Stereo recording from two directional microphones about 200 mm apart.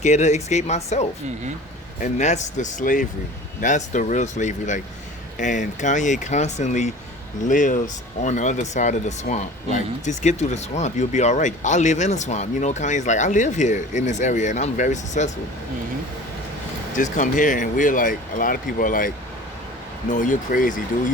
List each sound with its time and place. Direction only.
0.0 s speech: 35° left (ahead or behind)
16.9 s speech: 40° left (ahead or behind)